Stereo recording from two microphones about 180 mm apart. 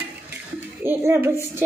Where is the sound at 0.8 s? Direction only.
10° right (ahead or behind).